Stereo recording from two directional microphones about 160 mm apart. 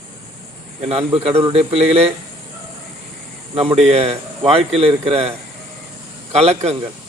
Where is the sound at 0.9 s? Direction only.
40° right (ahead or behind).